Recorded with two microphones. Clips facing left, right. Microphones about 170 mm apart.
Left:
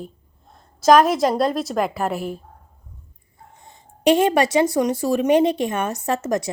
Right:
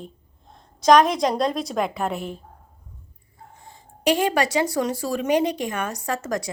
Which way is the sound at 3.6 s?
20° left (ahead or behind).